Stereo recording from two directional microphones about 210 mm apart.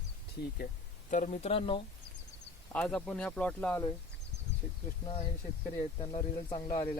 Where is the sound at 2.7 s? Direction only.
5° left (ahead or behind).